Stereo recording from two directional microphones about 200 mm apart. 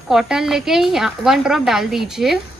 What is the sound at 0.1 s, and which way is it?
A woman's voice, centre (ahead or behind).